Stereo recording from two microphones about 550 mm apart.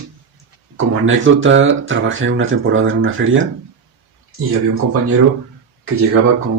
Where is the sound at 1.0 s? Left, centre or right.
Right.